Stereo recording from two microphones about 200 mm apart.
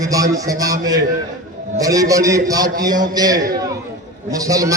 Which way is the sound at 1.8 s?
15° right (ahead or behind).